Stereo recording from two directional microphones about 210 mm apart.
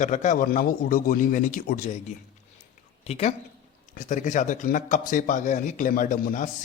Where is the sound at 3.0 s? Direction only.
30° left (ahead or behind).